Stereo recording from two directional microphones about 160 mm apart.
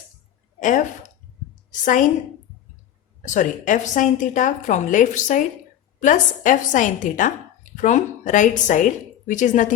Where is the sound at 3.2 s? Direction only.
50° left (ahead or behind).